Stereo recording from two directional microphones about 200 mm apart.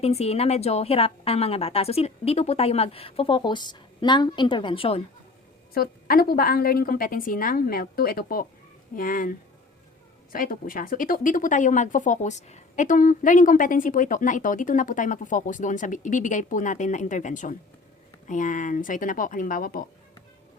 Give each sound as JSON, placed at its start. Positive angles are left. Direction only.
{"t": 0.0, "sound": "a woman's voice", "side_deg": 30}
{"t": 5.7, "sound": "a woman's voice", "side_deg": 50}
{"t": 10.3, "sound": "speech", "side_deg": 45}